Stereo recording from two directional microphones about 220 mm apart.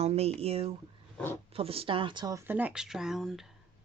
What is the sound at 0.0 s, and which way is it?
Speech, 30° right (ahead or behind).